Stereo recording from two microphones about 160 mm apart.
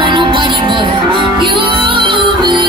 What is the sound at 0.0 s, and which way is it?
Music, 30° right (ahead or behind).